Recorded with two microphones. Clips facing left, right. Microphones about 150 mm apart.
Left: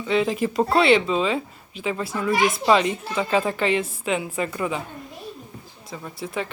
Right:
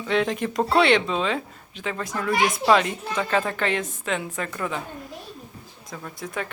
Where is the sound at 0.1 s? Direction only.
Centre (ahead or behind).